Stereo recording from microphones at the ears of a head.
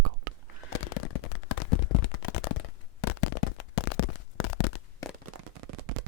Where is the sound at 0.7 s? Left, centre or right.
Left.